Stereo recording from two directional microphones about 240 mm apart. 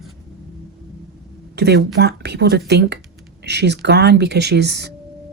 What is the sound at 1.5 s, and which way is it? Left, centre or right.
Speech, right.